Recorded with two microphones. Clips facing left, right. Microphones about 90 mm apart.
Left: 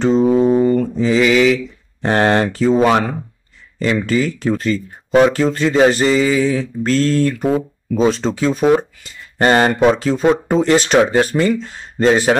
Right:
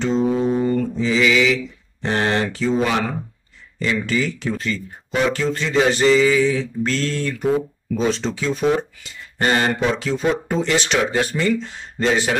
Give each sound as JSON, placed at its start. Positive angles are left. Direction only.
{"t": 0.0, "sound": "mantra", "side_deg": 40}
{"t": 0.9, "sound": "speech", "side_deg": 45}